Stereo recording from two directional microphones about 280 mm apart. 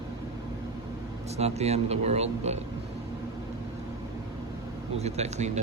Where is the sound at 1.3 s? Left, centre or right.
Right.